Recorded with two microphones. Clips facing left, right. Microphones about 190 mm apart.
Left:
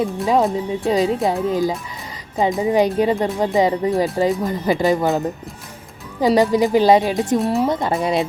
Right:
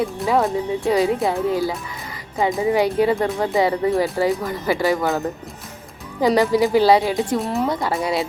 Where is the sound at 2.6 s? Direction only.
20° left (ahead or behind).